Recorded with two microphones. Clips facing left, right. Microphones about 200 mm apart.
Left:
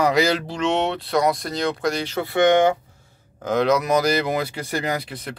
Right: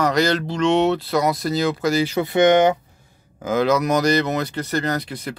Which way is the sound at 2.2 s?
20° right (ahead or behind).